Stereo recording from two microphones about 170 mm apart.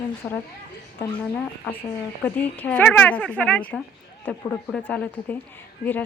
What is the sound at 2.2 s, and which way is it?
A woman's voice, 10° left (ahead or behind).